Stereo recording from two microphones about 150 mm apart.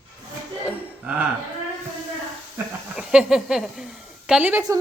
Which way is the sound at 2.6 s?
15° right (ahead or behind).